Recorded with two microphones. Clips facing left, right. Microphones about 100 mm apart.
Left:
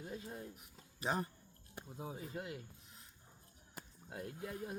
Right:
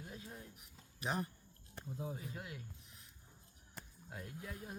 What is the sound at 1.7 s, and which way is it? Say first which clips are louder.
Speech: right 2 dB; 15° left (ahead or behind).